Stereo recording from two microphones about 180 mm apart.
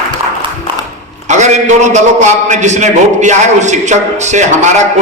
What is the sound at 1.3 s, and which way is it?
A man's voice, 40° right (ahead or behind).